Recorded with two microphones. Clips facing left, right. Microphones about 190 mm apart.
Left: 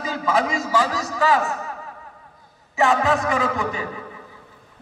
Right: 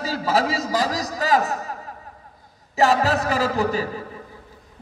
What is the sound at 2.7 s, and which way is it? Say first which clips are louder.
A man's voice: even; 35° right (ahead or behind).